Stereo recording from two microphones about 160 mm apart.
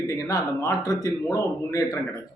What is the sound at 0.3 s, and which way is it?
A man's voice, 20° left (ahead or behind).